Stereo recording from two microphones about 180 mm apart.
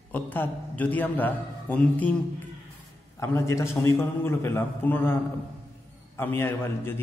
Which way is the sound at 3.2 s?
15° left (ahead or behind).